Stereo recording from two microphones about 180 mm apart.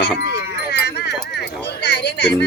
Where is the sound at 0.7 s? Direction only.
65° left (ahead or behind).